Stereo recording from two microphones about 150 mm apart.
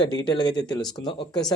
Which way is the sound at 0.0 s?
30° left (ahead or behind).